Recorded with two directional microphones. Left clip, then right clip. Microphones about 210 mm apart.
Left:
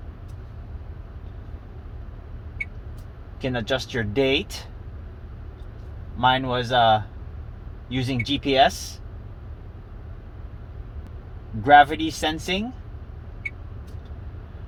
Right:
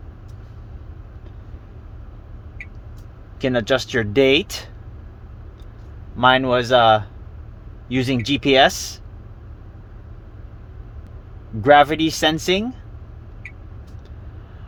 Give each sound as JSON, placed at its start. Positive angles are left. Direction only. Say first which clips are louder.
{"t": 3.4, "sound": "speech", "louder": "right 7 dB", "side_deg": -60}
{"t": 6.1, "sound": "speech", "louder": "right 6 dB", "side_deg": -60}
{"t": 11.6, "sound": "speech", "louder": "right 2 dB", "side_deg": -60}